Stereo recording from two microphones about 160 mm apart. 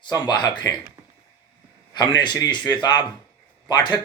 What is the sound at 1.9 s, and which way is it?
A man's voice, 25° left (ahead or behind).